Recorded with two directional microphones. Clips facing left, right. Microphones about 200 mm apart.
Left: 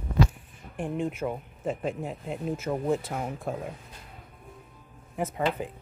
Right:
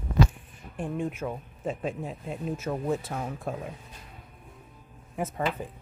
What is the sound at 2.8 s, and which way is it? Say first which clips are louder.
Speech: left 2 dB; 15° left (ahead or behind).